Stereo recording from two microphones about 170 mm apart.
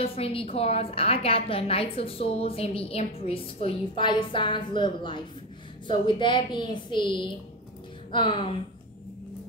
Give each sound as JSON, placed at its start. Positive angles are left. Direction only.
{"t": 0.0, "sound": "a woman's voice", "side_deg": 35}